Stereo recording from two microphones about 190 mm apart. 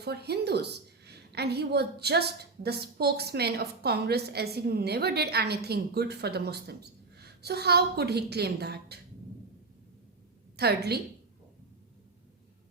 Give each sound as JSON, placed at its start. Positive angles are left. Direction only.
{"t": 0.0, "sound": "a woman's voice", "side_deg": -60}
{"t": 10.6, "sound": "a woman's voice", "side_deg": -60}